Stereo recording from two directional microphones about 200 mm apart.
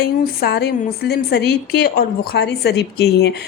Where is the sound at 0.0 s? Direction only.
55° left (ahead or behind).